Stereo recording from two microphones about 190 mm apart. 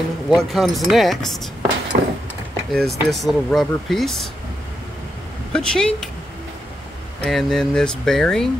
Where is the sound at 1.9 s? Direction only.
55° right (ahead or behind).